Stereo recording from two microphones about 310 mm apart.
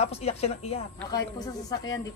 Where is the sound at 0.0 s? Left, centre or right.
Centre.